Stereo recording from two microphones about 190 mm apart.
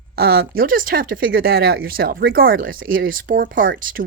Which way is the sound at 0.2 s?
55° right (ahead or behind).